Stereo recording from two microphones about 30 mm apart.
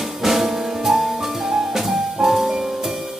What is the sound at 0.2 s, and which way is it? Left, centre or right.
Music, centre.